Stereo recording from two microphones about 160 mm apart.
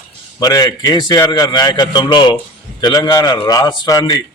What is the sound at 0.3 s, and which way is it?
A man's voice, 25° left (ahead or behind).